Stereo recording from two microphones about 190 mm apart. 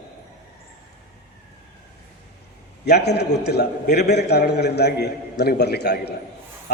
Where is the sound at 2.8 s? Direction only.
60° left (ahead or behind).